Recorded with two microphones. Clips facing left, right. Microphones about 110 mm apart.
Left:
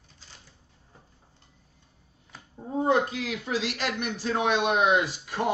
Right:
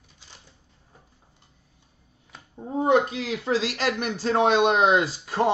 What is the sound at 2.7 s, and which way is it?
A man's voice, 20° right (ahead or behind).